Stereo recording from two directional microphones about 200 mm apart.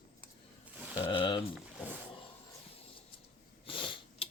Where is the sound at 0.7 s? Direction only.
10° right (ahead or behind).